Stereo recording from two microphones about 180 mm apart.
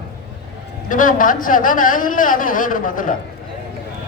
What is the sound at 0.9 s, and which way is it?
Speech, 50° left (ahead or behind).